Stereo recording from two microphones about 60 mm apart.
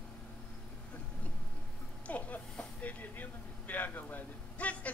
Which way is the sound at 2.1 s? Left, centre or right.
Left.